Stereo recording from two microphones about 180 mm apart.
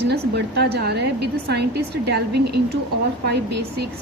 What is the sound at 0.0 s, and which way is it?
A woman's voice, 65° right (ahead or behind).